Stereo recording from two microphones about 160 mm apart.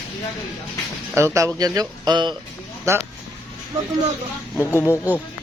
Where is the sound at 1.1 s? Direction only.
20° right (ahead or behind).